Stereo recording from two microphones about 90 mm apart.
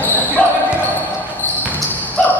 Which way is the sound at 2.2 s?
15° left (ahead or behind).